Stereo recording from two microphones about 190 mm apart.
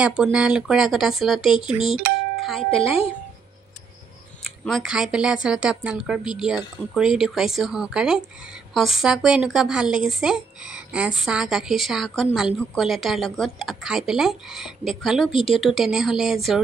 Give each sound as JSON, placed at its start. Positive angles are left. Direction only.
{"t": 0.0, "sound": "speech", "side_deg": -5}
{"t": 2.3, "sound": "music", "side_deg": 0}
{"t": 4.6, "sound": "speech", "side_deg": 0}